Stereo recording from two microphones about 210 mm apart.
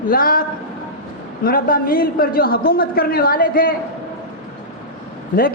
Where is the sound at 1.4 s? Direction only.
45° left (ahead or behind).